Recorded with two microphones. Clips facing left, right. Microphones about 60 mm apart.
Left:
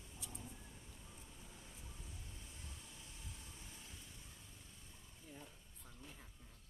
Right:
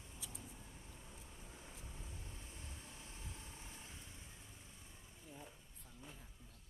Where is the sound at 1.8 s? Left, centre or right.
Right.